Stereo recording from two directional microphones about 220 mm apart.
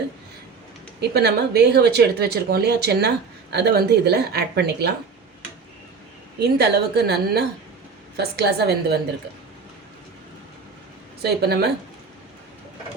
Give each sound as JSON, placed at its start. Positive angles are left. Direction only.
{"t": 1.1, "sound": "speech", "side_deg": -50}
{"t": 6.4, "sound": "speech", "side_deg": -45}
{"t": 11.2, "sound": "speech", "side_deg": -45}